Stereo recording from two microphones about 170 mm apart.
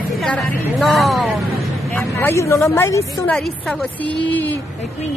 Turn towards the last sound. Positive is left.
turn(degrees=10)  # may be behind; listen again after turning